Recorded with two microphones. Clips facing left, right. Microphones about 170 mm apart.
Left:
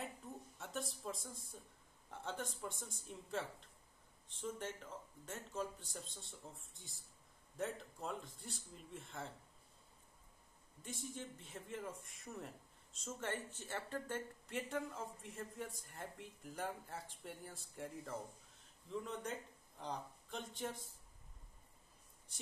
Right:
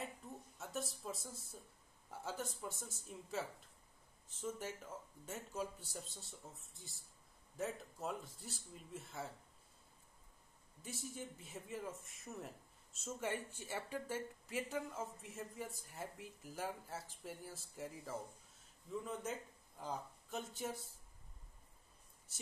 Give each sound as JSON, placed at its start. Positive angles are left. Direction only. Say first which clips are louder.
{"t": 0.6, "sound": "a man's voice", "louder": "right 2 dB", "side_deg": 0}
{"t": 10.8, "sound": "a man's voice", "louder": "even", "side_deg": -5}